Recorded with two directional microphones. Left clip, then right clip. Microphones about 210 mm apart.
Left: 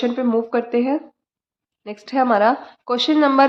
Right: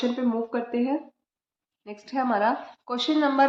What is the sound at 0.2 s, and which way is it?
A woman's voice, 55° left (ahead or behind).